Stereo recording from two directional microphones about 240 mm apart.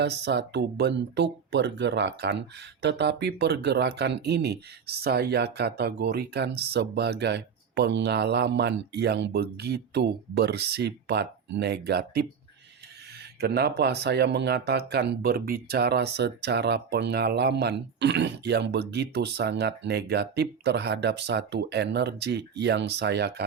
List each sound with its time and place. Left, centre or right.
0.0 s speech: right
13.4 s speech: right